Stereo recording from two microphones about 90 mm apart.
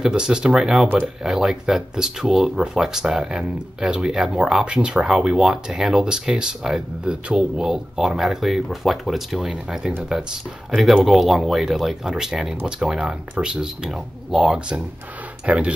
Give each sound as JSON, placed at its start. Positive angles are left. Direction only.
{"t": 0.0, "sound": "speech", "side_deg": -10}